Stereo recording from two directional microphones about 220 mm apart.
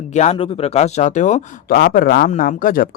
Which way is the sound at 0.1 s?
30° left (ahead or behind).